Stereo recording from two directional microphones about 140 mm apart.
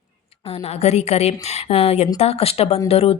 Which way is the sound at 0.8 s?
50° left (ahead or behind).